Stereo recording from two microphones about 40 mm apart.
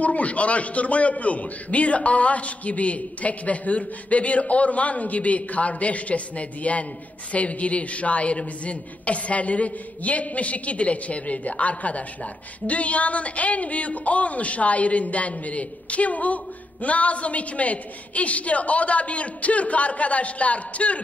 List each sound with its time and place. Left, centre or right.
0.0 s a man's voice: left